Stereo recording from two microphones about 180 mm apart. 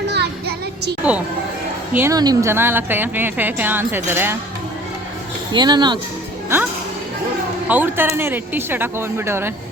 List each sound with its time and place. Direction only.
0.1 s a sound: 65° right (ahead or behind)
1.0 s a woman's voice: 5° right (ahead or behind)
5.5 s speech: 25° right (ahead or behind)
7.7 s a woman's voice: 10° right (ahead or behind)